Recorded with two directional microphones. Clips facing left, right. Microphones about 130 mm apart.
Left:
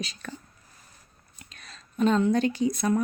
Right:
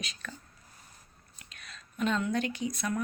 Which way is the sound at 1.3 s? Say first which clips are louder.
Left 2 dB; 35° left (ahead or behind).